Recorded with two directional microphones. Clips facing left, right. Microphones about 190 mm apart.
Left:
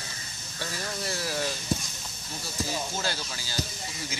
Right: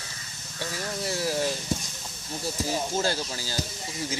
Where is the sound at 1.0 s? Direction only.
20° right (ahead or behind).